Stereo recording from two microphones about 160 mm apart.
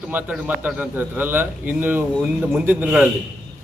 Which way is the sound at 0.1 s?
10° right (ahead or behind).